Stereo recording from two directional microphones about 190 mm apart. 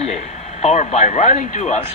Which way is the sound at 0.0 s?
35° left (ahead or behind).